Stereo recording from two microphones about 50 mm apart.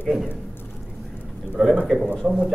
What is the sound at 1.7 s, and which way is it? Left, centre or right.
Speech, right.